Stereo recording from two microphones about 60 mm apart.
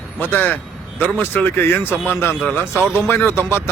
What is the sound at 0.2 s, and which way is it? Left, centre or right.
Speech, left.